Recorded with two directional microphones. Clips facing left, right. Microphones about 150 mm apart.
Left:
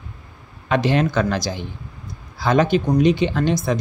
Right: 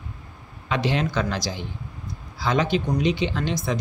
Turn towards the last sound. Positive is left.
turn(degrees=50)  # may be behind; listen again after turning